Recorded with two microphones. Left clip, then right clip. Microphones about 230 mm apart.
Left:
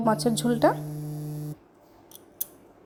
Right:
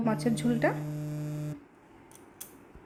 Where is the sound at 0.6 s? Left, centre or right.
Centre.